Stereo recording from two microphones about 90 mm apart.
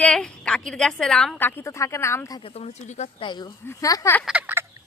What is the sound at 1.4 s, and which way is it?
Speech, 20° left (ahead or behind).